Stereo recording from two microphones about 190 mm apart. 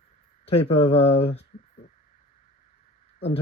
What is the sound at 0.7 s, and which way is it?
Speech, 30° left (ahead or behind).